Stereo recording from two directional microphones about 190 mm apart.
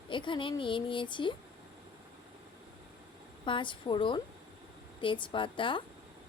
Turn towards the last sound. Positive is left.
turn(degrees=25)  # may be behind; listen again after turning